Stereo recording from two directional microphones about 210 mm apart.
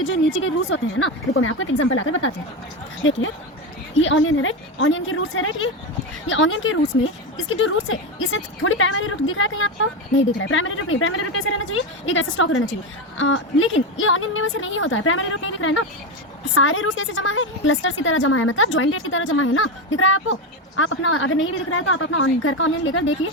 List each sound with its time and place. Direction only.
0.0 s a woman's voice: 65° left (ahead or behind)